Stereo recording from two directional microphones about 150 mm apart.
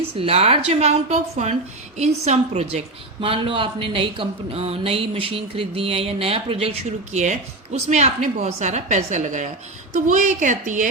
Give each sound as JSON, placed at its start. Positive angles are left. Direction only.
{"t": 0.1, "sound": "a woman's voice", "side_deg": -40}